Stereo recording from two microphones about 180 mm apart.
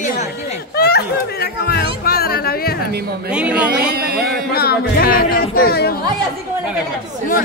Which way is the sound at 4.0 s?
60° right (ahead or behind).